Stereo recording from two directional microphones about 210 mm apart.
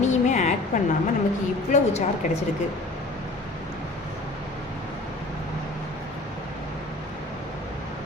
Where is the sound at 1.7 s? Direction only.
30° left (ahead or behind).